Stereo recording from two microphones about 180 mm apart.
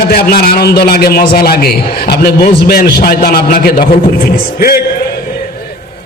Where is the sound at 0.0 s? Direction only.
60° left (ahead or behind).